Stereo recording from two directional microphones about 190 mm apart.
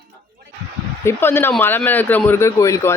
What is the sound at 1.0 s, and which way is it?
Speech, 10° left (ahead or behind).